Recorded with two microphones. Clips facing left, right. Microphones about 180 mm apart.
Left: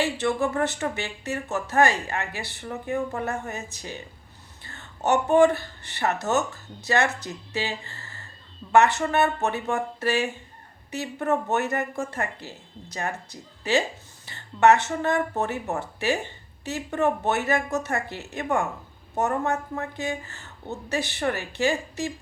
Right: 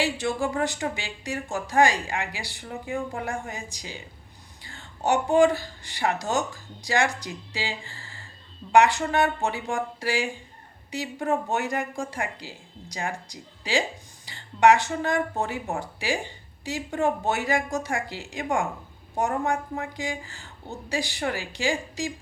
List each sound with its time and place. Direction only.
0.3 s speech: 15° right (ahead or behind)